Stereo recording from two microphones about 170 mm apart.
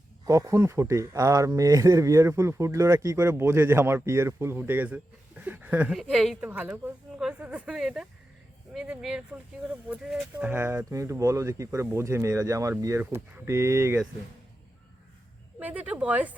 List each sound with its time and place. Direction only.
0.3 s speech: 20° right (ahead or behind)
15.5 s speech: 10° right (ahead or behind)